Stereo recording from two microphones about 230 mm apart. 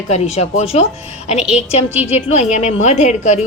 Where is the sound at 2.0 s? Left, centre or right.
Left.